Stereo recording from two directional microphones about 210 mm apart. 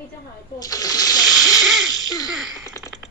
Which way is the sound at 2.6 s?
15° left (ahead or behind).